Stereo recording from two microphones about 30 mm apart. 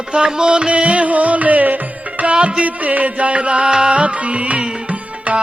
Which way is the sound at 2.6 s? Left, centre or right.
Right.